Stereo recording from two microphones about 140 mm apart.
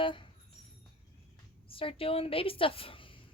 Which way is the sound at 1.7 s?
40° left (ahead or behind).